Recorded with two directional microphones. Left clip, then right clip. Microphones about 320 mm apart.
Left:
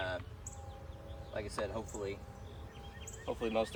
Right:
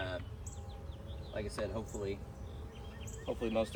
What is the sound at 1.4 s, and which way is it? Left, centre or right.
Speech, centre.